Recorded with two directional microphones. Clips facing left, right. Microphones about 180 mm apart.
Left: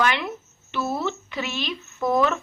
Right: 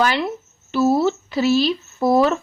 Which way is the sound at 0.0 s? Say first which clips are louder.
Right 4 dB; 35° right (ahead or behind).